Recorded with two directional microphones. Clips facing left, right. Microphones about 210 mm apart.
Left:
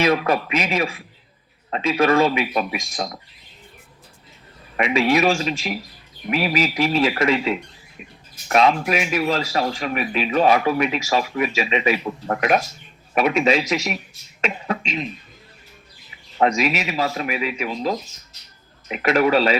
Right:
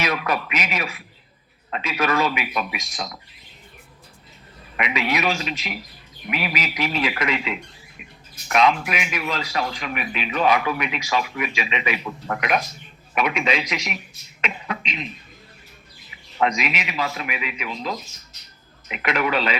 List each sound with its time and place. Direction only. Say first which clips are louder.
0.0 s speech: left 6 dB; 30° left (ahead or behind)
2.7 s speech: left 5 dB; 50° left (ahead or behind)
4.8 s speech: left 6 dB; 30° left (ahead or behind)
16.4 s speech: left 4 dB; 40° left (ahead or behind)